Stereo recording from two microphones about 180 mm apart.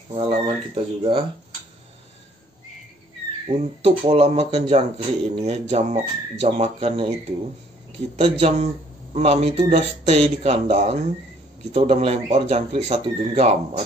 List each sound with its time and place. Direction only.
0.1 s speech: 30° right (ahead or behind)
3.4 s speech: 30° right (ahead or behind)
8.2 s speech: 35° right (ahead or behind)